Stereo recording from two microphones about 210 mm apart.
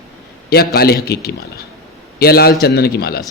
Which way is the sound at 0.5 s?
50° left (ahead or behind).